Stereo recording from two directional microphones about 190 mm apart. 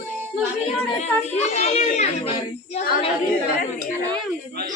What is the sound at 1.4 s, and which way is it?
Speech, 35° left (ahead or behind).